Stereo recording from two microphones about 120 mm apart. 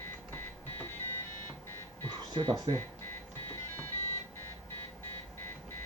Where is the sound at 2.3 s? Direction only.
35° right (ahead or behind).